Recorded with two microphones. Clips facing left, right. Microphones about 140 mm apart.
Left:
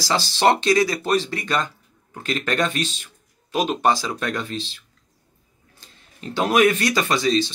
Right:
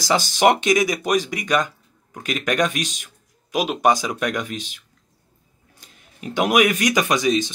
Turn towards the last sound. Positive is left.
turn(degrees=-15)  # may be behind; listen again after turning